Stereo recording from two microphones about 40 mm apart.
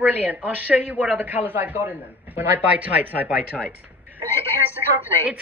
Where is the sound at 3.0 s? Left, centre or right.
Right.